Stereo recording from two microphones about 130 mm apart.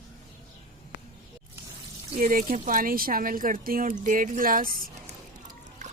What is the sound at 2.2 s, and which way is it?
Speech, 90° right.